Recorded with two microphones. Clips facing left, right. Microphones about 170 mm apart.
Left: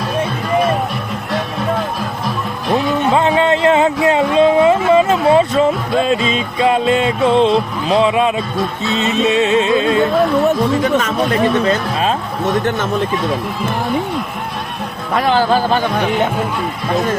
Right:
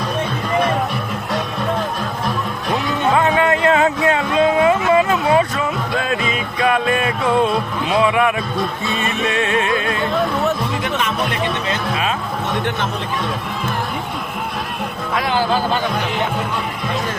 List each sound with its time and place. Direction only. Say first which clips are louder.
3.2 s a sound: left 2 dB; 25° left (ahead or behind)
8.8 s music: left 5 dB; 20° left (ahead or behind)
11.6 s speech: left 5 dB; 35° left (ahead or behind)